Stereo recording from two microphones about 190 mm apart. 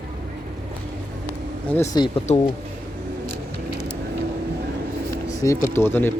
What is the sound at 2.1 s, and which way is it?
Speech, 35° left (ahead or behind).